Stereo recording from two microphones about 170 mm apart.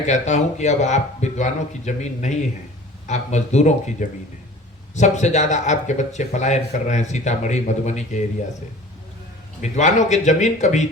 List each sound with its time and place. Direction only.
0.0 s speech: 45° left (ahead or behind)
9.6 s speech: 45° left (ahead or behind)